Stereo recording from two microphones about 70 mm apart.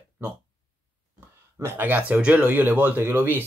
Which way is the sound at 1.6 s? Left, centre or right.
Right.